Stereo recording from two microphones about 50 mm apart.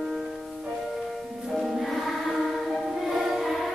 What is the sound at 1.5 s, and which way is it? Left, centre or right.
Choir, centre.